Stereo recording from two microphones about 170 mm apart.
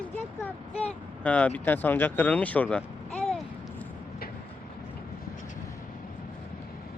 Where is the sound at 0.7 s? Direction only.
40° left (ahead or behind).